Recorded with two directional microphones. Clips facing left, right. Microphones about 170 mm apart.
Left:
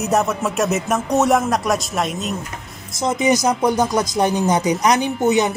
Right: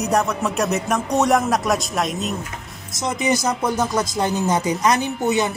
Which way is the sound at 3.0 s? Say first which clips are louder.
Left 4 dB; 20° left (ahead or behind).